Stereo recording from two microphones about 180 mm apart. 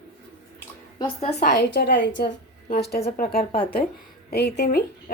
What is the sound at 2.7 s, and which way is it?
Speech, 60° left (ahead or behind).